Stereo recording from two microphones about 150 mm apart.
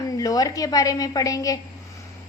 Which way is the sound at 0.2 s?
25° left (ahead or behind).